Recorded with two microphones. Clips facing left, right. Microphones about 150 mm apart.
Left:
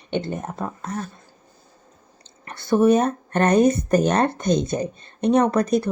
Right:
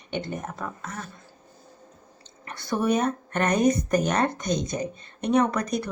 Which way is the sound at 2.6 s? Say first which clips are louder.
Left 7 dB; 25° left (ahead or behind).